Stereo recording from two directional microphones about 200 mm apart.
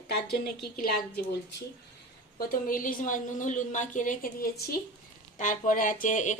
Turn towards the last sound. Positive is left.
turn(degrees=40)  # may be behind; listen again after turning